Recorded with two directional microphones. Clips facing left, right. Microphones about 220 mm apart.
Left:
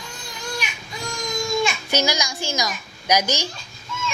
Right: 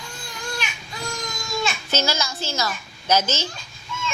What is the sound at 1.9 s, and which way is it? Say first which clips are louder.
A woman's voice: left 2 dB; 15° left (ahead or behind).